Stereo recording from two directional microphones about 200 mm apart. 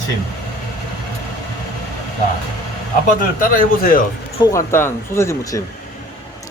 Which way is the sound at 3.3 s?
45° left (ahead or behind).